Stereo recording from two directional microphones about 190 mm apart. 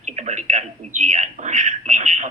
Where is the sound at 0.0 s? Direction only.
35° right (ahead or behind).